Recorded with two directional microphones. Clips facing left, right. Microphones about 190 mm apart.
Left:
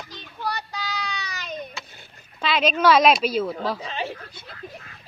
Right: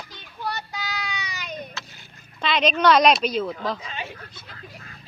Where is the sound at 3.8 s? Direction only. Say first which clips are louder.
Left 5 dB; 35° left (ahead or behind).